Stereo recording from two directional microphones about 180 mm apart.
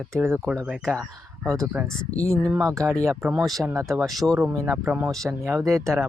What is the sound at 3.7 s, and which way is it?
Speech, 15° right (ahead or behind).